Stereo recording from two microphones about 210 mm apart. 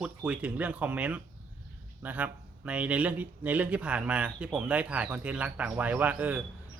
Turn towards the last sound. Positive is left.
turn(degrees=-5)  # may be behind; listen again after turning